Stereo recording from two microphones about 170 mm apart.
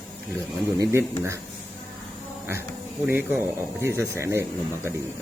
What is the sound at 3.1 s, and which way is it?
Speech, 10° right (ahead or behind).